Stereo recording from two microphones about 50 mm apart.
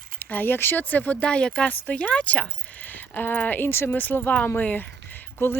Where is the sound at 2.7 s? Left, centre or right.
Left.